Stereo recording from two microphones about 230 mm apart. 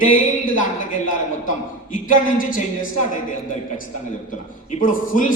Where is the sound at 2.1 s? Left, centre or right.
Left.